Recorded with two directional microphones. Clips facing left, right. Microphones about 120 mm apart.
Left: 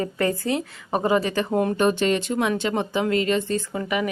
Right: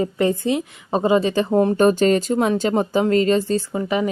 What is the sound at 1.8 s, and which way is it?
Speech, 40° right (ahead or behind).